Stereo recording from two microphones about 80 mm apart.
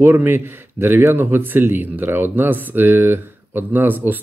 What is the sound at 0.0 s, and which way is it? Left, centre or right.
Speech, right.